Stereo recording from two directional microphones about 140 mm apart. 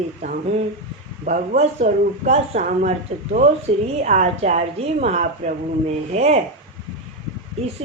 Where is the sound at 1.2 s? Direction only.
60° right (ahead or behind).